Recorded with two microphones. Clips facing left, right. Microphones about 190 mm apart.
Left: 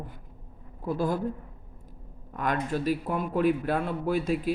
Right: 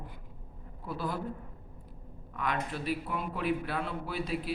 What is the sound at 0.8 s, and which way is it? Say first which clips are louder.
Speech: left 8 dB; 45° left (ahead or behind).